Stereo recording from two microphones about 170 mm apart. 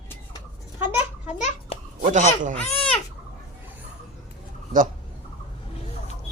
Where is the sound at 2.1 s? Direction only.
45° right (ahead or behind).